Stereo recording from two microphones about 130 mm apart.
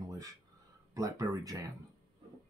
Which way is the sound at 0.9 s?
25° right (ahead or behind).